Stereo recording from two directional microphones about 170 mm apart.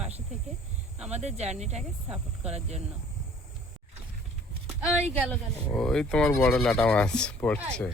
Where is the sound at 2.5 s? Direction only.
40° right (ahead or behind).